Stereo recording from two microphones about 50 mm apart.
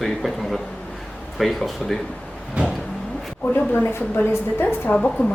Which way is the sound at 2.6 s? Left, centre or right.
Right.